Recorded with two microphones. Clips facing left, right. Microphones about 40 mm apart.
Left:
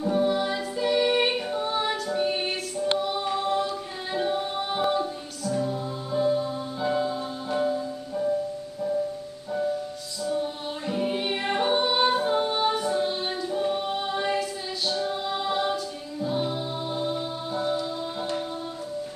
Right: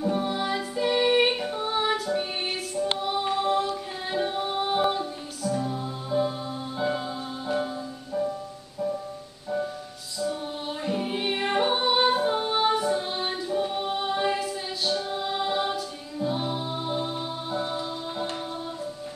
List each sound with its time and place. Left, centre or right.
0.0 s music: centre
3.0 s music: centre
3.5 s a capella: centre
5.5 s music: centre
10.2 s music: centre
15.3 s choir: centre
17.1 s music: centre